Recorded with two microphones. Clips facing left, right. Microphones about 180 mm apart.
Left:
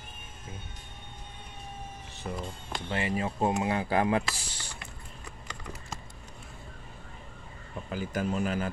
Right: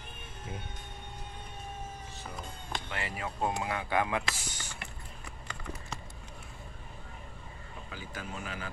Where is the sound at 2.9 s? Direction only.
25° left (ahead or behind).